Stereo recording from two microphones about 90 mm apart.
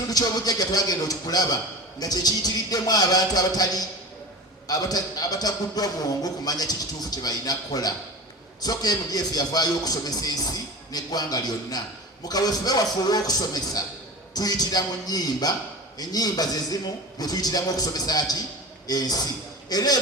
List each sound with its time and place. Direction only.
0.1 s a man's voice: 45° left (ahead or behind)